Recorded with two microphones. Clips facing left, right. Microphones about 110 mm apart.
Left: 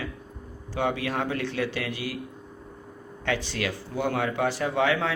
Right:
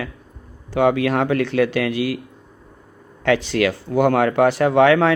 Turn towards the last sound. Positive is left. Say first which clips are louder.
# right 11 dB
turn(degrees=-75)  # may be behind; listen again after turning